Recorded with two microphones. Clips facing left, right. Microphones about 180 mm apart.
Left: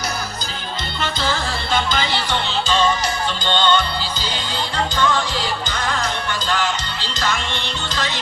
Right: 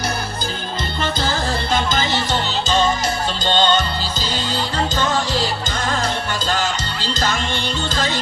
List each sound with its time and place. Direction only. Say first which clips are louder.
1.0 s music: right 1 dB; 45° right (ahead or behind)
4.9 s music: even; 45° right (ahead or behind)